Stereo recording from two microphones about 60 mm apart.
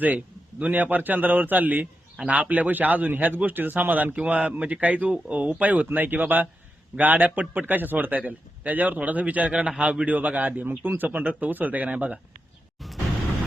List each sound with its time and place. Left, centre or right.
0.6 s a man's voice: right